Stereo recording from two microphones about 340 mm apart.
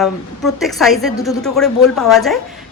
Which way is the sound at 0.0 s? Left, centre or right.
Centre.